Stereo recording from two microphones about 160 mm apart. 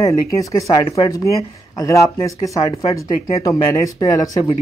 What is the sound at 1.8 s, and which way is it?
Speech, 20° left (ahead or behind).